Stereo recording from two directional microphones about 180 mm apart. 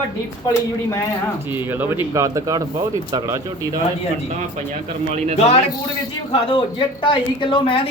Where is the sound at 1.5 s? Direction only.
10° right (ahead or behind).